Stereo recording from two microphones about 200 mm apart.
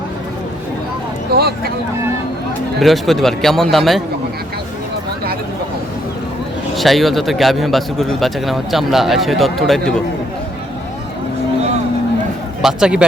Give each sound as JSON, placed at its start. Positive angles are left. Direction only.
{"t": 1.3, "sound": "speech", "side_deg": -50}
{"t": 2.8, "sound": "a man's voice", "side_deg": 0}
{"t": 6.7, "sound": "a man's voice", "side_deg": 0}
{"t": 12.6, "sound": "a man's voice", "side_deg": -5}